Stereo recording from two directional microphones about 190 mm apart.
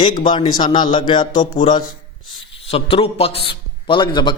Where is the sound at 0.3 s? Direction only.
25° left (ahead or behind).